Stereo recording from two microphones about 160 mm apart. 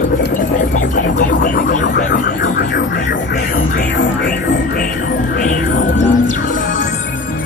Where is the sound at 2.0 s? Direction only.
55° left (ahead or behind).